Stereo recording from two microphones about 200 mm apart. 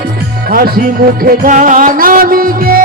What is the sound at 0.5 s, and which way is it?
Music, 50° right (ahead or behind).